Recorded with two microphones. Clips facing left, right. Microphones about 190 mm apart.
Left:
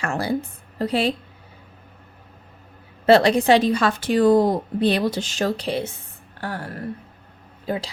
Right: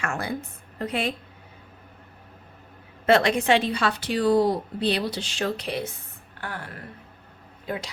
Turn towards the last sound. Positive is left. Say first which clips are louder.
# left 5 dB
turn(degrees=30)  # may be behind; listen again after turning